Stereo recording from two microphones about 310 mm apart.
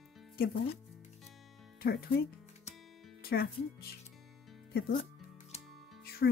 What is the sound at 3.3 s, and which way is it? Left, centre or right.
Speech, left.